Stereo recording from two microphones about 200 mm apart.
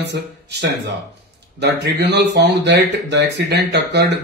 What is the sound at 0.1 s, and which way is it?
Speech, 60° right (ahead or behind).